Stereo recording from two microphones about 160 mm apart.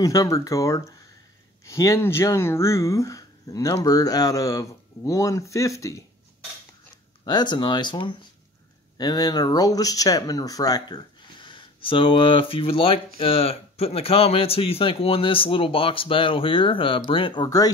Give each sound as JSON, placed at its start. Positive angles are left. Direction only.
{"t": 0.0, "sound": "speech", "side_deg": 20}
{"t": 7.2, "sound": "speech", "side_deg": 25}